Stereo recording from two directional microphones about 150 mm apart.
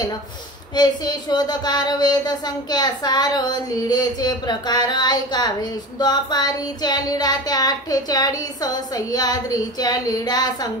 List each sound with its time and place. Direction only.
0.7 s speech: 30° left (ahead or behind)